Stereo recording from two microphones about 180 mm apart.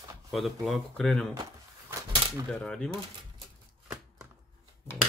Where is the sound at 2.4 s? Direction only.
5° left (ahead or behind).